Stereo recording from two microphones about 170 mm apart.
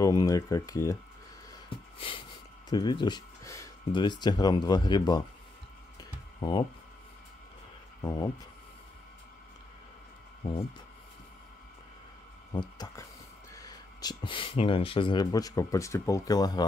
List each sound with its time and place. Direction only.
0.0 s speech: 20° left (ahead or behind)
2.0 s a sound: 30° left (ahead or behind)
2.7 s speech: 25° left (ahead or behind)
5.9 s computer keyboard: 25° left (ahead or behind)
8.0 s speech: 20° left (ahead or behind)
12.5 s speech: 20° left (ahead or behind)